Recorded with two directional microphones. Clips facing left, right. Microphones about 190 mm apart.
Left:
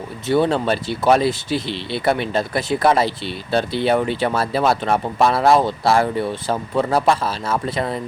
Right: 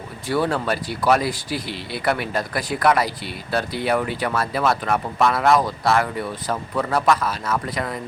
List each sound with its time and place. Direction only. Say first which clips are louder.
0.3 s speech: left 4 dB; 25° left (ahead or behind)